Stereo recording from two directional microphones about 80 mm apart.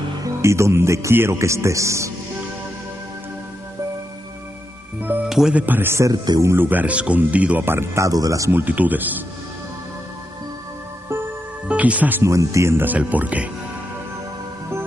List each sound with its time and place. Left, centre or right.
0.2 s speech: right
5.1 s music: right
5.5 s speech: right
8.1 s speech: right
8.5 s speech: right
11.6 s music: centre
12.2 s speech: right
12.8 s speech: centre